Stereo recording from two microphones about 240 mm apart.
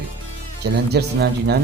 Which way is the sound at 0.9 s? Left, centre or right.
Right.